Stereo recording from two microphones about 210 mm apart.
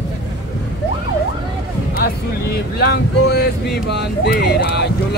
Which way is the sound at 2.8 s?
50° left (ahead or behind).